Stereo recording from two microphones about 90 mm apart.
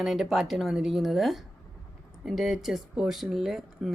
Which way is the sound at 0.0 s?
5° right (ahead or behind).